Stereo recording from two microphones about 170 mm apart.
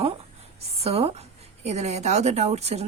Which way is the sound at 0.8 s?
35° right (ahead or behind).